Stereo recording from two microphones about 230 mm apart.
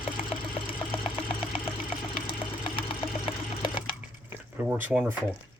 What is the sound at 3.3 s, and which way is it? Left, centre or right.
Sewing machine, left.